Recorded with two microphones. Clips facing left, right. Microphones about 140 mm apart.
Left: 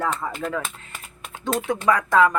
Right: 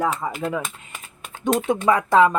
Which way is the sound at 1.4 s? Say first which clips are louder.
Right 3 dB; 20° right (ahead or behind).